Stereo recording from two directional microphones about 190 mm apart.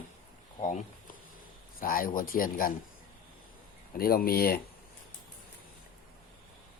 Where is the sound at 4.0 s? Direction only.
50° left (ahead or behind).